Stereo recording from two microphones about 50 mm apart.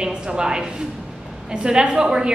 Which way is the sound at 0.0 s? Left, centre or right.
Centre.